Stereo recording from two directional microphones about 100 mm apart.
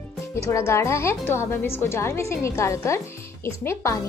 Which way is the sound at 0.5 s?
30° left (ahead or behind).